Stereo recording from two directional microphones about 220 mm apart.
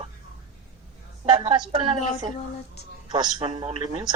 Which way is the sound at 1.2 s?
25° right (ahead or behind).